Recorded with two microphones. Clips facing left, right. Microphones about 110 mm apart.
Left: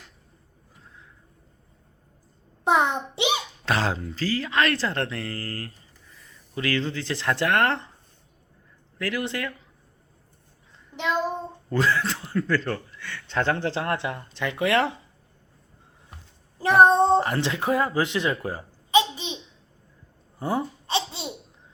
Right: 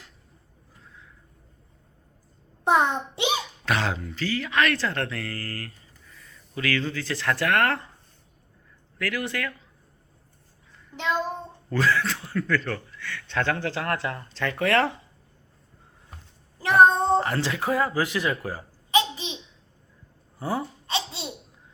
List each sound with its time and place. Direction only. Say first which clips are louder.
2.6 s a child's voice: even; 20° left (ahead or behind)
9.0 s a man's voice: left 1 dB; 25° left (ahead or behind)
11.7 s a man's voice: even; 25° left (ahead or behind)
16.6 s speech: left 1 dB; 25° left (ahead or behind)
20.4 s laughter: left 2 dB; 20° left (ahead or behind)